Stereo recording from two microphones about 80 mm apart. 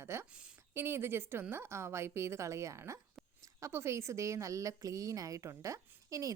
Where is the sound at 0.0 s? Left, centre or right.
Right.